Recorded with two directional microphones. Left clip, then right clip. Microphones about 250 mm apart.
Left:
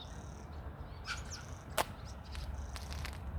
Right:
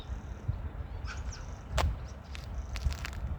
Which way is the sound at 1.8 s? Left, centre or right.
Centre.